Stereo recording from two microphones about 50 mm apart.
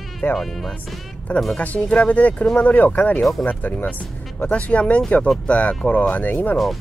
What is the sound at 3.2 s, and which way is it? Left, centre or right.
Speech, centre.